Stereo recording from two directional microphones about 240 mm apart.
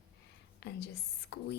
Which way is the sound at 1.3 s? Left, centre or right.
Left.